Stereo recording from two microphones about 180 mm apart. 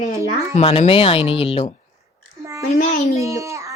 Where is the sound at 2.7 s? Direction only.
50° left (ahead or behind).